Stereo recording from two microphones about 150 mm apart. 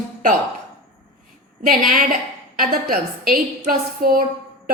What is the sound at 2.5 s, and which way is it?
A woman's voice, 75° right (ahead or behind).